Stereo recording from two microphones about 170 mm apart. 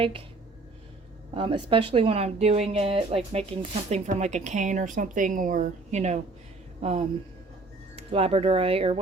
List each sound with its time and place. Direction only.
1.3 s speech: 30° right (ahead or behind)
7.9 s speech: 35° right (ahead or behind)